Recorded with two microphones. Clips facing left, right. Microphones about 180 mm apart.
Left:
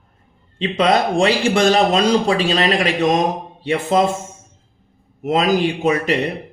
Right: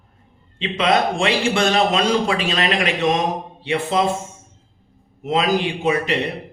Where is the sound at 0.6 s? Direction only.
40° left (ahead or behind).